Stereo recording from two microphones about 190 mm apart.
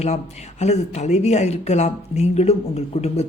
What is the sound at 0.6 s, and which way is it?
Speech, 35° left (ahead or behind).